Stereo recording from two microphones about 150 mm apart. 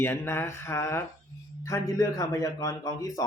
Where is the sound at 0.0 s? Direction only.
15° left (ahead or behind).